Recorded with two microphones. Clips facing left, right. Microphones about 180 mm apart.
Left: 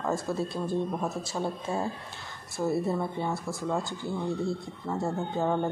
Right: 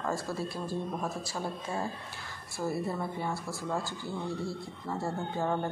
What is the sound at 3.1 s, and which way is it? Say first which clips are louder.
Speech: left 3 dB; 20° left (ahead or behind).